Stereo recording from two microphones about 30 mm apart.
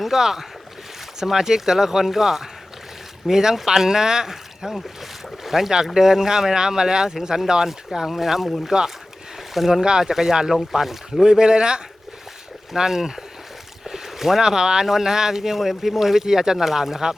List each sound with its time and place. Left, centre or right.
0.0 s speech: centre
7.9 s speech: centre
8.7 s speech: right
9.6 s speech: centre
10.5 s speech: centre
11.2 s speech: right
12.7 s speech: centre